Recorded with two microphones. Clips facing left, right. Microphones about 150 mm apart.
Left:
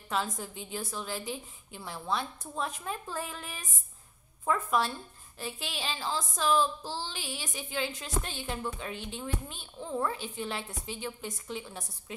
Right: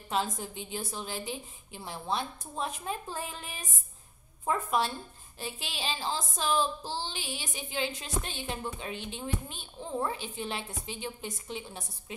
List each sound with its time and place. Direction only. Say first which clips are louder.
0.1 s speech: right 1 dB; 25° right (ahead or behind)